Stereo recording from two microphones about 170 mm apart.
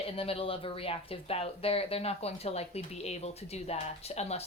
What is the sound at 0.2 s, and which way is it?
Speech, 35° left (ahead or behind).